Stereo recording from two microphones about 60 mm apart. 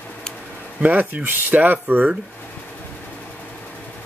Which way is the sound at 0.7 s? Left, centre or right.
Right.